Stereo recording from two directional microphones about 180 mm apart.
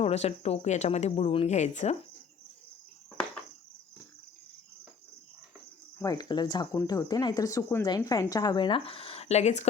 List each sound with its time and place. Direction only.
0.0 s speech: 35° left (ahead or behind)
6.0 s speech: 20° left (ahead or behind); by 9.6 s 40° left (ahead or behind)